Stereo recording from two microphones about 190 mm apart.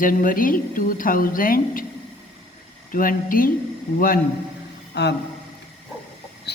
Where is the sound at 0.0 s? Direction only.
45° left (ahead or behind).